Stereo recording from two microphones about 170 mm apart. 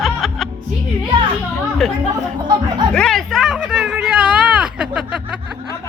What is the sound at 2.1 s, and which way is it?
Speech, 25° right (ahead or behind).